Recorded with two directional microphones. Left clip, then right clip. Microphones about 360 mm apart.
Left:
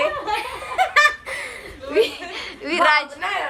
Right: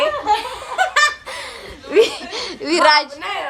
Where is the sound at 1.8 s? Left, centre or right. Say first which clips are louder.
Right 5 dB; right.